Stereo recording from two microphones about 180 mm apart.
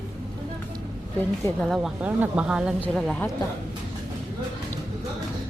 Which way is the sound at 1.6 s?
Centre (ahead or behind).